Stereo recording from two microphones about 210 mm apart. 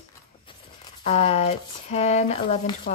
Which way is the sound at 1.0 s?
30° left (ahead or behind).